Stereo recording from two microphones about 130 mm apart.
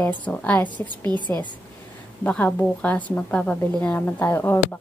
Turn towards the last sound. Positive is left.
turn(degrees=15)  # may be behind; listen again after turning